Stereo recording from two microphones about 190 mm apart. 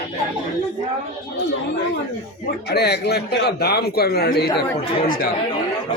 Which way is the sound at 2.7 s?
60° left (ahead or behind).